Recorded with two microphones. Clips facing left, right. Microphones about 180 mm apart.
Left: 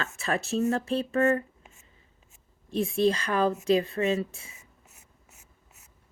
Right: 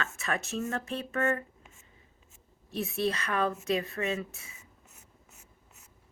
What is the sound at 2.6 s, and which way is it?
A woman's voice, 30° left (ahead or behind).